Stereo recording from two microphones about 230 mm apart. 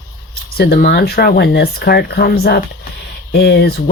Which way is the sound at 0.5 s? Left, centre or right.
Left.